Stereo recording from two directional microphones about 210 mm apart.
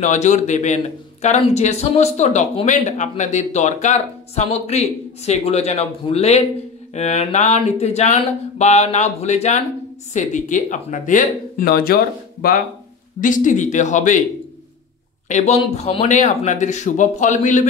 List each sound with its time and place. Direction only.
0.0 s a man's voice: 35° left (ahead or behind)
15.2 s a man's voice: 35° left (ahead or behind)